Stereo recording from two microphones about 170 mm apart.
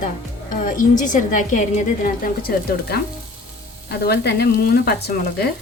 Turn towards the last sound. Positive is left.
turn(degrees=70)  # may be behind; listen again after turning